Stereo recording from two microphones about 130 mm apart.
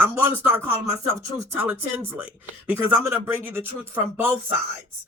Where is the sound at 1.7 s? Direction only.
10° right (ahead or behind).